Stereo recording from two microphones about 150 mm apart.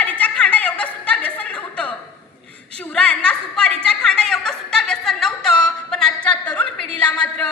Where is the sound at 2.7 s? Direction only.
5° left (ahead or behind).